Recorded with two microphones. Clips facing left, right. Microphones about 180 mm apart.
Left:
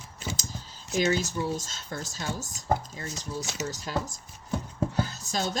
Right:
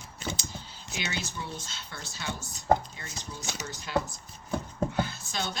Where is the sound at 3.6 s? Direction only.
40° left (ahead or behind).